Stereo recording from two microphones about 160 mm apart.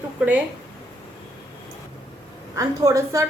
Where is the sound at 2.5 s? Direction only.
20° right (ahead or behind).